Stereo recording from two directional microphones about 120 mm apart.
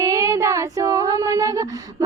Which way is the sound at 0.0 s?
25° right (ahead or behind).